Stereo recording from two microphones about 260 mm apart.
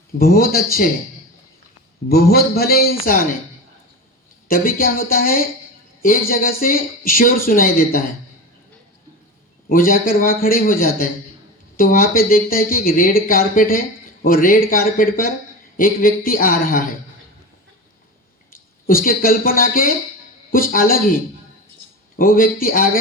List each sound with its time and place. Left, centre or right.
0.2 s speech: left
2.0 s speech: left
4.4 s speech: left
9.6 s speech: left
18.9 s speech: left
22.2 s speech: left